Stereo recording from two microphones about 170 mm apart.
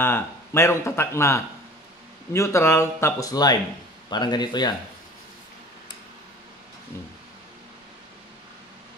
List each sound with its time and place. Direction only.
0.0 s speech: 15° left (ahead or behind)